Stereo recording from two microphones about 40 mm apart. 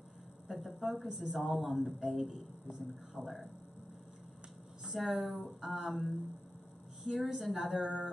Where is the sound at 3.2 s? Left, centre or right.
Right.